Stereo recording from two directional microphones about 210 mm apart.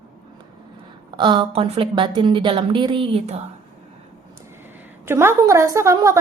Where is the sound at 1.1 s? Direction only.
20° right (ahead or behind).